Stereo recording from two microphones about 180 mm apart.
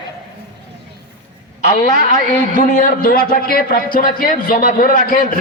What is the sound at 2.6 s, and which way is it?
A man's voice, 55° left (ahead or behind).